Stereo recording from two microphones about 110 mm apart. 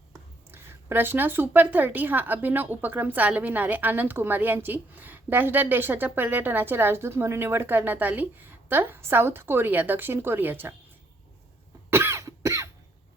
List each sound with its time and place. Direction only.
0.5 s a woman's voice: 20° right (ahead or behind)
11.9 s cough: 25° right (ahead or behind)